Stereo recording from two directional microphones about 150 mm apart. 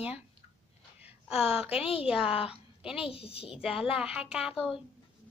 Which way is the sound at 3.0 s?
40° left (ahead or behind).